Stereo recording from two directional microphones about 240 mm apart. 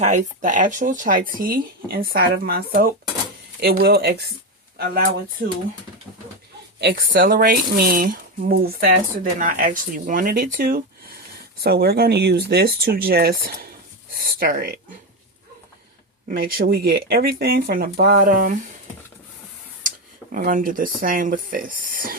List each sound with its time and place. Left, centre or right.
0.0 s speech: right
6.7 s speech: right
16.3 s speech: right
20.3 s speech: right